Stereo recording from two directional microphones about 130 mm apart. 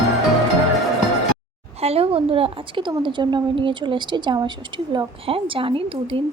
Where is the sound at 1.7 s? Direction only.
50° right (ahead or behind).